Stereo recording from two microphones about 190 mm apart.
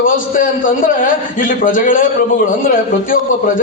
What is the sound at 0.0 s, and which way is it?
A man's voice, 45° left (ahead or behind).